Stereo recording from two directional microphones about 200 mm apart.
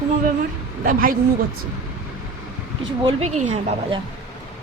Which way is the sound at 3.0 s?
35° right (ahead or behind).